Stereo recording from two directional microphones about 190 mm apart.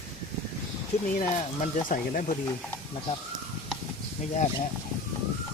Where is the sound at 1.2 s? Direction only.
40° left (ahead or behind).